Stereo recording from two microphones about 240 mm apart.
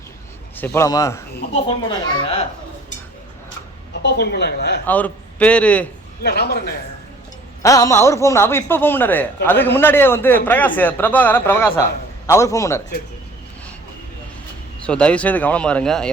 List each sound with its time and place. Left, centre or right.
0.5 s speech: centre
3.9 s a woman's voice: left
4.9 s speech: centre
6.2 s a woman's voice: left
7.6 s speech: centre
14.8 s speech: centre